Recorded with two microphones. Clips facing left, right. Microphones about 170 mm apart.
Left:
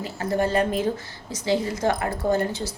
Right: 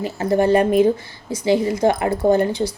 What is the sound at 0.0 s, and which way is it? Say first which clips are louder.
A woman's voice: right 6 dB; 15° right (ahead or behind).